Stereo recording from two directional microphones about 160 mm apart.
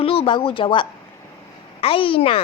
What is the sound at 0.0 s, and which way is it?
A woman's voice, 35° left (ahead or behind).